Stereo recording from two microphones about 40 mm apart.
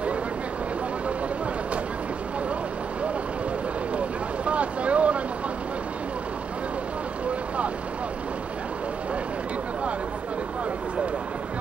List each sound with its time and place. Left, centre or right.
4.5 s boat: right